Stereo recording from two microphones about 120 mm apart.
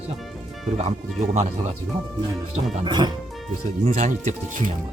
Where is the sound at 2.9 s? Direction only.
35° right (ahead or behind).